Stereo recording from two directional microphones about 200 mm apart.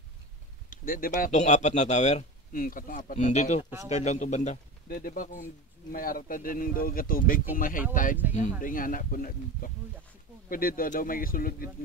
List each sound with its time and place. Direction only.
0.7 s speech: 45° left (ahead or behind)